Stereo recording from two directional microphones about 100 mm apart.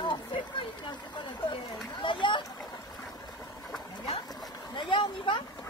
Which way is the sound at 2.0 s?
55° left (ahead or behind).